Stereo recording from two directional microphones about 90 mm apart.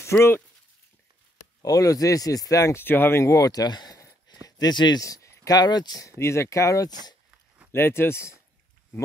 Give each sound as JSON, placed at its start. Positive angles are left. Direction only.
{"t": 0.0, "sound": "speech", "side_deg": 30}
{"t": 1.6, "sound": "speech", "side_deg": 40}
{"t": 2.8, "sound": "speech", "side_deg": 25}
{"t": 4.3, "sound": "a sound", "side_deg": 50}
{"t": 5.0, "sound": "speech", "side_deg": 35}
{"t": 6.0, "sound": "speech", "side_deg": 30}